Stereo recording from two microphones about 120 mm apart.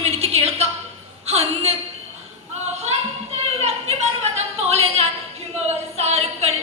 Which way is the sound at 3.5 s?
65° right (ahead or behind).